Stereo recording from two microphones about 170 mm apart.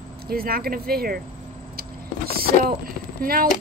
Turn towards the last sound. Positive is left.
turn(degrees=-60)  # may be behind; listen again after turning